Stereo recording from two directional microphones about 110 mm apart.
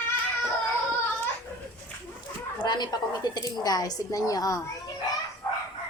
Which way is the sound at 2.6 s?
40° left (ahead or behind).